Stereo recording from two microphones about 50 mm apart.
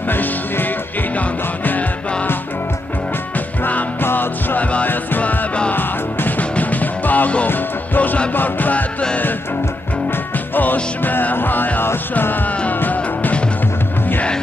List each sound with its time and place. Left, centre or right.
0.1 s music: left
4.0 s music: left
5.7 s music: left
10.5 s music: left